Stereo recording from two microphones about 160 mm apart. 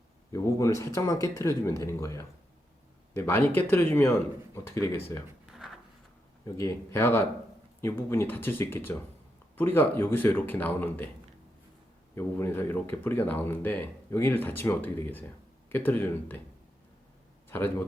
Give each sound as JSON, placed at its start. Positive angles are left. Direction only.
{"t": 0.3, "sound": "speech", "side_deg": 20}
{"t": 5.5, "sound": "a sound", "side_deg": -5}
{"t": 6.6, "sound": "speech", "side_deg": 15}
{"t": 12.1, "sound": "speech", "side_deg": 15}
{"t": 17.5, "sound": "speech", "side_deg": 15}